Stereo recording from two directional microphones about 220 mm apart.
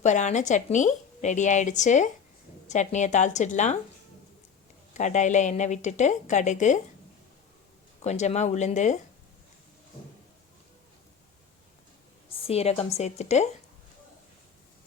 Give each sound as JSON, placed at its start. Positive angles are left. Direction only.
{"t": 0.0, "sound": "a woman's voice", "side_deg": 30}
{"t": 4.9, "sound": "a woman's voice", "side_deg": 35}
{"t": 8.0, "sound": "a woman's voice", "side_deg": 30}
{"t": 12.5, "sound": "a woman's voice", "side_deg": 25}